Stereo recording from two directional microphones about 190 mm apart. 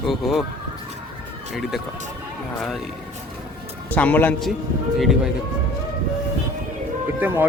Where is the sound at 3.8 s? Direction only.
10° left (ahead or behind).